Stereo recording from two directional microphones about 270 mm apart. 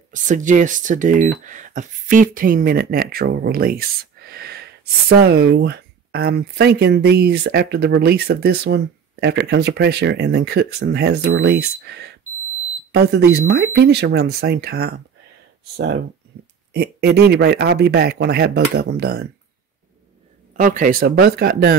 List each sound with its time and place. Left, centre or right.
0.1 s speech: right
20.5 s speech: right